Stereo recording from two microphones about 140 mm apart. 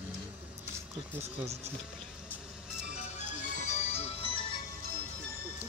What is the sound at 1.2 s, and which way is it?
Speech, 50° right (ahead or behind).